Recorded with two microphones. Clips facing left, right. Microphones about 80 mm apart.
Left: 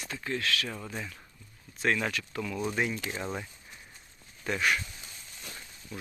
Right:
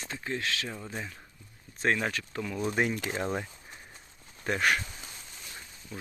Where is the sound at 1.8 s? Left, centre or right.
Right.